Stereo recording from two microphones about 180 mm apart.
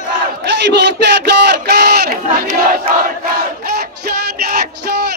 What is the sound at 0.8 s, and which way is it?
Crowd, 70° right (ahead or behind).